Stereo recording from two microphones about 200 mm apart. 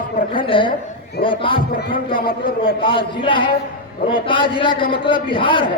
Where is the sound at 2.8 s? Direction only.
25° left (ahead or behind).